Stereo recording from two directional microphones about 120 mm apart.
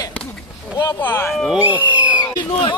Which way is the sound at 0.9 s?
15° left (ahead or behind).